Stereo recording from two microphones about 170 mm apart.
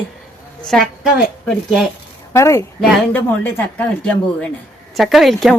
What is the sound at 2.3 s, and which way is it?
Speech, 15° left (ahead or behind).